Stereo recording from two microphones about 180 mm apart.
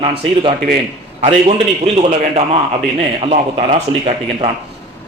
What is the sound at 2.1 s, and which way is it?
A man's voice, 35° right (ahead or behind).